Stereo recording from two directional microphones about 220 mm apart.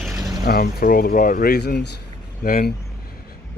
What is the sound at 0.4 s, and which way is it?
Speech, 45° left (ahead or behind).